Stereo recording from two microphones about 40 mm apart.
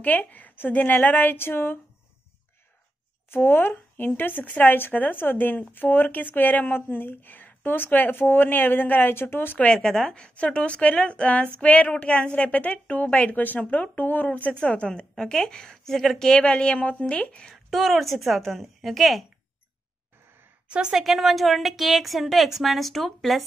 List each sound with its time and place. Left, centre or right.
0.0 s speech: left
1.4 s speech: left
3.3 s speech: left
9.1 s speech: left
9.7 s a woman's voice: centre; by 14.5 s left
14.5 s a woman's voice: left; by 16.1 s centre
16.2 s a woman's voice: left
17.6 s a woman's voice: centre
20.9 s a woman's voice: centre